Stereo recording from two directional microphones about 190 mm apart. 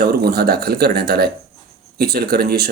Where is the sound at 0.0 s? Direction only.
55° right (ahead or behind).